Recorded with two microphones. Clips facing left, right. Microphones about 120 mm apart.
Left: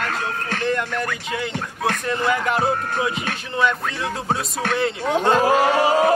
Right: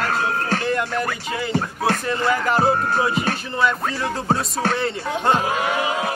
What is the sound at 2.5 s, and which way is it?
Music, 35° right (ahead or behind).